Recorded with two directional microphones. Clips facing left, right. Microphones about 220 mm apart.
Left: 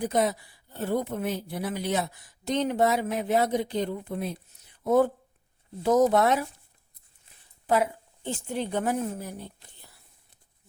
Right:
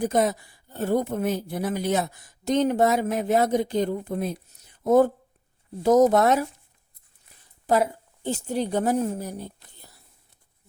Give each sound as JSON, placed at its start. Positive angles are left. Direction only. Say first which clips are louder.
{"t": 0.0, "sound": "speech", "louder": "right 3 dB", "side_deg": -45}
{"t": 7.7, "sound": "a woman's voice", "louder": "right 3 dB", "side_deg": -40}